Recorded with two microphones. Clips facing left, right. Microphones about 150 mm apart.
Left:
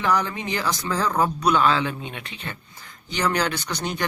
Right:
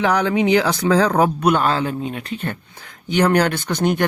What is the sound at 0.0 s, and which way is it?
A man's voice, 75° right (ahead or behind).